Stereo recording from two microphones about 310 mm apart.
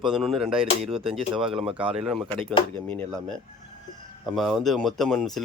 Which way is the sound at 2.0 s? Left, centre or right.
Centre.